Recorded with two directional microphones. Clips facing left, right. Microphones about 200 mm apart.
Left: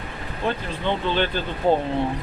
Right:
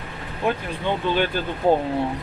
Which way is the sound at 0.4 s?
10° right (ahead or behind).